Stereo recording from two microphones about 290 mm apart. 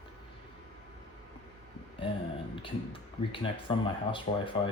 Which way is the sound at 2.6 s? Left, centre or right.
Centre.